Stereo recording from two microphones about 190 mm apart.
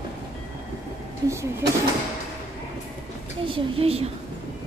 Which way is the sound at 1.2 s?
20° right (ahead or behind).